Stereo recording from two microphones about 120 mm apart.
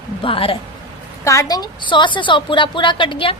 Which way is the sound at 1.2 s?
25° left (ahead or behind).